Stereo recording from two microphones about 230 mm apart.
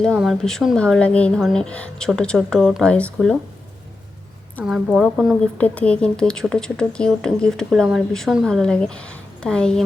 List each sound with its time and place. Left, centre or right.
0.0 s a woman's voice: centre
4.6 s a woman's voice: centre